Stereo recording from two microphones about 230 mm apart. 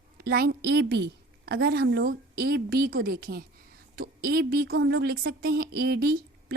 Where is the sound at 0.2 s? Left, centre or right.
Right.